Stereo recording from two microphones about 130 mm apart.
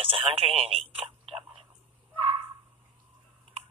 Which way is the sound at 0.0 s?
45° right (ahead or behind).